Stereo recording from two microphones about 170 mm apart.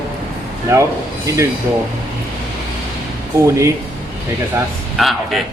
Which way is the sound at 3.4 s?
15° right (ahead or behind).